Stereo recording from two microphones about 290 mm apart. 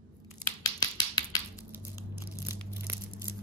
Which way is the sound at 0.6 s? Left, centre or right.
Centre.